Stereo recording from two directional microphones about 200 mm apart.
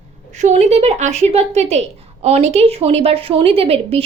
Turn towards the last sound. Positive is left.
turn(degrees=-30)  # may be behind; listen again after turning